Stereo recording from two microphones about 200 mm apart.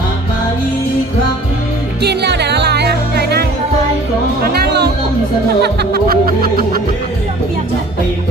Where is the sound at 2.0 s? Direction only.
55° right (ahead or behind).